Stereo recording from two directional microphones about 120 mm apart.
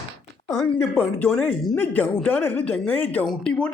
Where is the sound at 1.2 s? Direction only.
10° left (ahead or behind).